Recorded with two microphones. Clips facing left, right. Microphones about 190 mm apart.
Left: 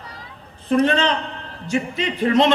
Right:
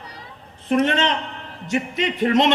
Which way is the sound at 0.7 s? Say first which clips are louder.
Left 2 dB; 25° right (ahead or behind).